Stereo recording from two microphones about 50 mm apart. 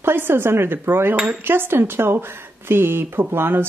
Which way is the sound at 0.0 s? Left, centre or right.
Right.